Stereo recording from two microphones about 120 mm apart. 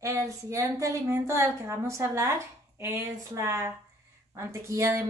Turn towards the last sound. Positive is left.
turn(degrees=-25)  # may be behind; listen again after turning